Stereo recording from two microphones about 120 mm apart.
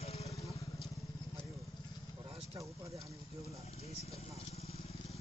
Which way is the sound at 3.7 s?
60° left (ahead or behind).